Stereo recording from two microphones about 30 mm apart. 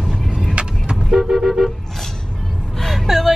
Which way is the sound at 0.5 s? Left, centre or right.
Right.